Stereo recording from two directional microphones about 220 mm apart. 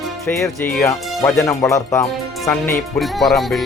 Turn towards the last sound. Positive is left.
turn(degrees=0)  # may be behind; listen again after turning